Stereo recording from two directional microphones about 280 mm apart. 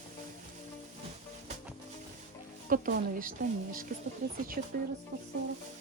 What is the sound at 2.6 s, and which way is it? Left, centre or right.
A woman's voice, right.